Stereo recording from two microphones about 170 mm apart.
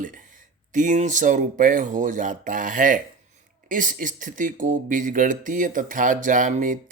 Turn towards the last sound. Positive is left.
turn(degrees=-50)  # may be behind; listen again after turning